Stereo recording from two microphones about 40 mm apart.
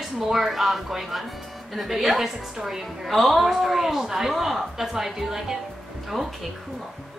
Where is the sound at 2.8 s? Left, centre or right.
Centre.